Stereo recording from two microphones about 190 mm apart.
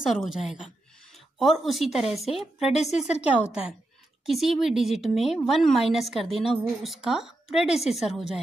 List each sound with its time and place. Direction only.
0.1 s a woman's voice: centre (ahead or behind)
2.6 s a woman's voice: 35° left (ahead or behind)
4.3 s a woman's voice: centre (ahead or behind)